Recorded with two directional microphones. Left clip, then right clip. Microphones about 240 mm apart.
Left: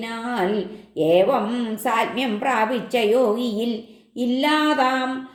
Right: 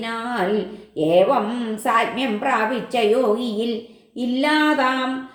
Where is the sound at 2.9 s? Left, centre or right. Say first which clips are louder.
Right 1 dB; left.